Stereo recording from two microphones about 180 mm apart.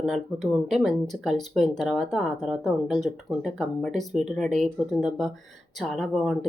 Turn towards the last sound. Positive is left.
turn(degrees=0)  # may be behind; listen again after turning